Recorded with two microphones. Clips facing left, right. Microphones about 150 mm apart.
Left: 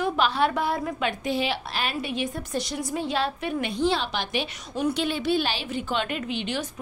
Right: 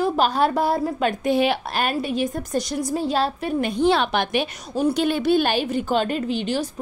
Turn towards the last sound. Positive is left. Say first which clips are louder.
# right 6 dB
turn(degrees=-35)  # may be behind; listen again after turning